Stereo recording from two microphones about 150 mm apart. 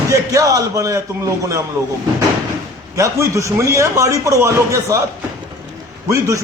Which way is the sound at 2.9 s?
20° right (ahead or behind).